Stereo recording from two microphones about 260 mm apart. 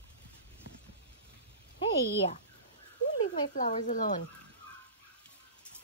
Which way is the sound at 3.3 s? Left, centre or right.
Left.